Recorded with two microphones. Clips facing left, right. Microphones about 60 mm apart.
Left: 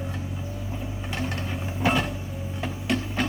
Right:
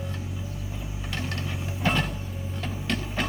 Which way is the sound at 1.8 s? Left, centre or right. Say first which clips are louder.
Left 2 dB; centre.